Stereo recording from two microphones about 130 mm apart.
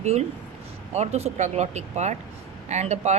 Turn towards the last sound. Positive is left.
turn(degrees=-60)  # may be behind; listen again after turning